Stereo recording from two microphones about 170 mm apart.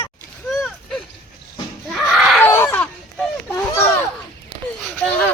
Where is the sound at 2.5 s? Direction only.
10° left (ahead or behind).